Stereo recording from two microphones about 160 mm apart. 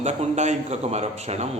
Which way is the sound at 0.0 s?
45° right (ahead or behind).